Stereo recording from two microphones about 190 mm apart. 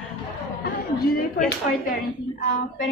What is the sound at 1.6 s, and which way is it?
Speech, 45° left (ahead or behind).